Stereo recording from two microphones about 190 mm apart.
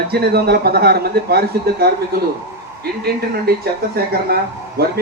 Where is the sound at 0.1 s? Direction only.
55° right (ahead or behind).